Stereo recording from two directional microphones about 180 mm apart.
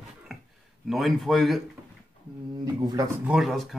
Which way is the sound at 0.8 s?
Centre (ahead or behind).